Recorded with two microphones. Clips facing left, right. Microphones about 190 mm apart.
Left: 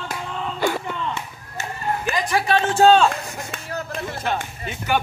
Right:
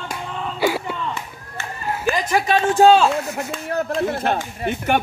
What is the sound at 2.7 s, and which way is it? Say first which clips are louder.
Speech: right 2 dB; 10° right (ahead or behind).